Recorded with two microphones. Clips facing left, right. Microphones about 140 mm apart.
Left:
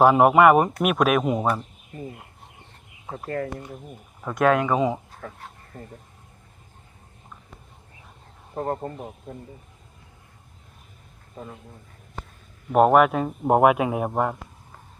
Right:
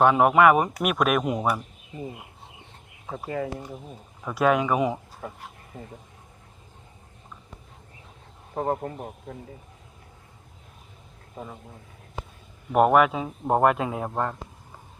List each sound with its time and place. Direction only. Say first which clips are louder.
0.0 s speech: left 3 dB; centre (ahead or behind)
1.5 s a sound: left 1 dB; 15° right (ahead or behind)
3.1 s speech: left 1 dB; 5° right (ahead or behind)
8.5 s speech: right 1 dB; 5° right (ahead or behind)
12.7 s a man's voice: left 2 dB; centre (ahead or behind)